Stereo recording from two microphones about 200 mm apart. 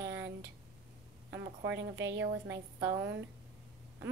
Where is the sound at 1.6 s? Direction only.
60° right (ahead or behind).